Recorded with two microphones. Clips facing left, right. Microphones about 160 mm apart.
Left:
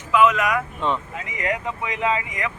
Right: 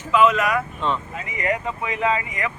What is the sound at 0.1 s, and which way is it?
Speech, 15° left (ahead or behind).